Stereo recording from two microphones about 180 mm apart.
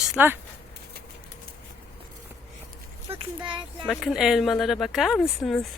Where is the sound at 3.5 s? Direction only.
25° right (ahead or behind).